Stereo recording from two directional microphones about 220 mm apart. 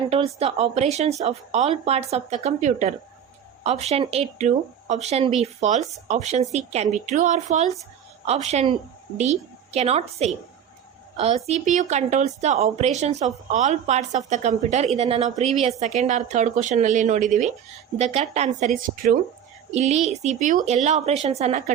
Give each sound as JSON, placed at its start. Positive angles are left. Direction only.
{"t": 0.1, "sound": "a woman's voice", "side_deg": -25}
{"t": 9.7, "sound": "speech", "side_deg": -30}
{"t": 11.4, "sound": "a woman's voice", "side_deg": -30}